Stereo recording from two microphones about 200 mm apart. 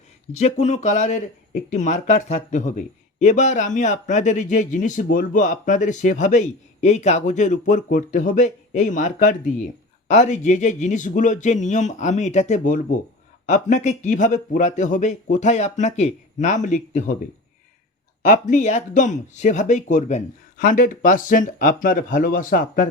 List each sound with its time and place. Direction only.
0.3 s speech: 35° left (ahead or behind)
18.2 s speech: 40° left (ahead or behind)